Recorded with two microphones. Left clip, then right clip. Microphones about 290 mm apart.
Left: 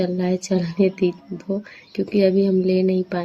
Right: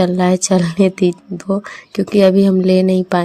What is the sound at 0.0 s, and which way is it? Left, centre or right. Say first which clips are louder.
Speech: right 8 dB; right.